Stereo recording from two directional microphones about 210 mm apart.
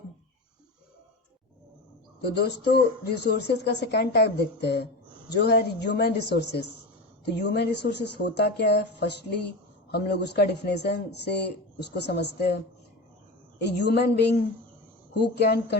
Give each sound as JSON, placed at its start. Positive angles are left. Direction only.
{"t": 2.2, "sound": "a woman's voice", "side_deg": 50}
{"t": 13.6, "sound": "a woman's voice", "side_deg": 55}